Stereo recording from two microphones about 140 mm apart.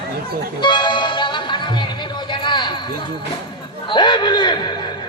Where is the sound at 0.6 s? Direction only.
35° left (ahead or behind).